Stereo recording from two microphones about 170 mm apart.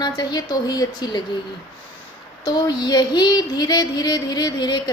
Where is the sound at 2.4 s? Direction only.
25° left (ahead or behind).